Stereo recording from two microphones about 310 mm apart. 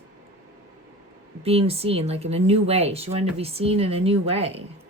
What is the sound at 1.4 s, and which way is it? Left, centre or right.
Speech, centre.